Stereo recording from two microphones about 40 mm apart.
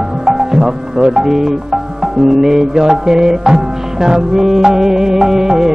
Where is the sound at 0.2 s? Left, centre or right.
Centre.